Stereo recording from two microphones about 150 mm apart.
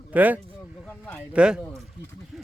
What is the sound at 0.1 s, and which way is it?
Speech, 10° right (ahead or behind).